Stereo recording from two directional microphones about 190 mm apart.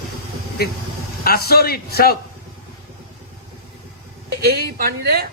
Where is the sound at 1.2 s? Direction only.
55° left (ahead or behind).